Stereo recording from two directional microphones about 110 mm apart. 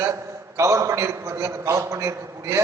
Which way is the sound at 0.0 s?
30° right (ahead or behind).